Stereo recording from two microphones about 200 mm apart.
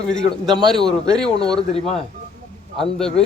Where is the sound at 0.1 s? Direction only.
5° left (ahead or behind).